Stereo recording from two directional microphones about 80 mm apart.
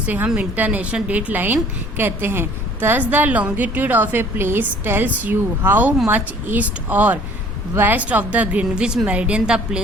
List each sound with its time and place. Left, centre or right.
0.3 s a woman's voice: right